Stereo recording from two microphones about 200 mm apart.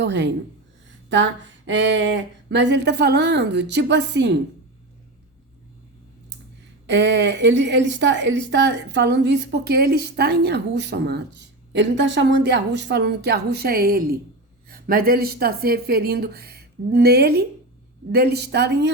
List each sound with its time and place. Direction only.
0.0 s speech: 60° right (ahead or behind)
6.8 s speech: 60° right (ahead or behind)